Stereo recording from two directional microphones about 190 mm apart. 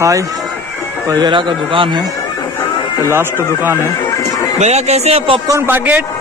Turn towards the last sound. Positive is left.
turn(degrees=-10)  # may be behind; listen again after turning